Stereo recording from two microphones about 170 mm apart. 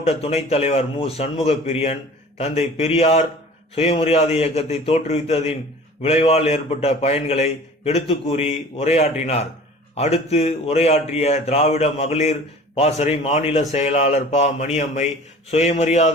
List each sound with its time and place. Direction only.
0.0 s a man's voice: 35° left (ahead or behind)